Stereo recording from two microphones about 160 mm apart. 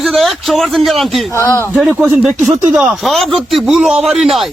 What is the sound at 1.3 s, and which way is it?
Speech, 15° left (ahead or behind).